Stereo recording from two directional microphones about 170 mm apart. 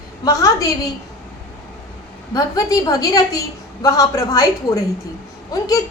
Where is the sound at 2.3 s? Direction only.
20° left (ahead or behind).